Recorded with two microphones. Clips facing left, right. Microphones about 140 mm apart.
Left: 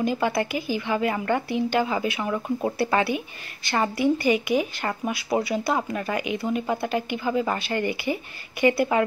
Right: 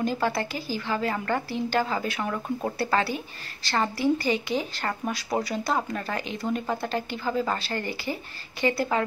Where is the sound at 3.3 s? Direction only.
35° right (ahead or behind).